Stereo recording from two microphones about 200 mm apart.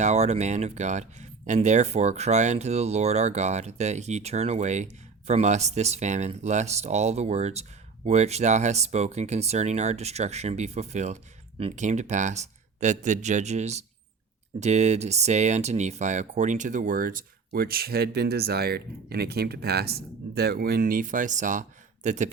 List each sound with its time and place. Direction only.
0.0 s speech: 35° right (ahead or behind)